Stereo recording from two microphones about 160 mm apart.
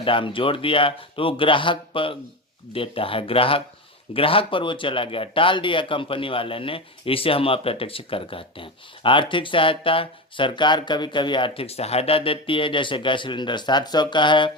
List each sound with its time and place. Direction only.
0.0 s speech: 35° left (ahead or behind)